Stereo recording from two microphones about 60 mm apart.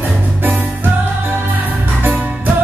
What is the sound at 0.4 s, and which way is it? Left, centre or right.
Music, right.